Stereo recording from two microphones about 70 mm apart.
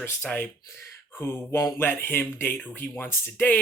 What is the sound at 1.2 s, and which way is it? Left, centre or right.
Speech, left.